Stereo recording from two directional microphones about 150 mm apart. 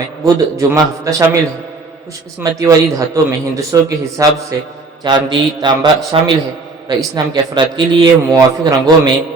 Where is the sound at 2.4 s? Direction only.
20° right (ahead or behind).